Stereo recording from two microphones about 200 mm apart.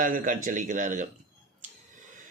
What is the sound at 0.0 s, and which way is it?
Speech, 45° right (ahead or behind).